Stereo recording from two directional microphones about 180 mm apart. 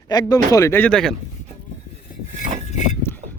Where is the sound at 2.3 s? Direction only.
40° left (ahead or behind).